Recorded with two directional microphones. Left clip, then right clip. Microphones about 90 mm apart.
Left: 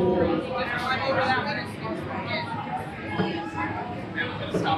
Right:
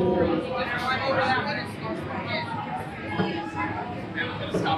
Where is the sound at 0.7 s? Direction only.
35° left (ahead or behind).